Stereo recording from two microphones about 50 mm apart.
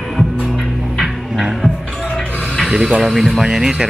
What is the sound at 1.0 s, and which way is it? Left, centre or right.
Music, centre.